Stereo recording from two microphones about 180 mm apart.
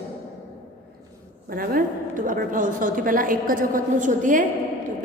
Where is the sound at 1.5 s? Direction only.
55° right (ahead or behind).